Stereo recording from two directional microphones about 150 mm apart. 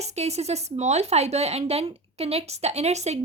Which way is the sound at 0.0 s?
45° right (ahead or behind).